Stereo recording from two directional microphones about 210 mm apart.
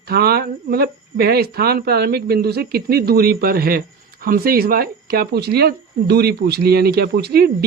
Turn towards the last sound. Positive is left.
turn(degrees=-50)  # may be behind; listen again after turning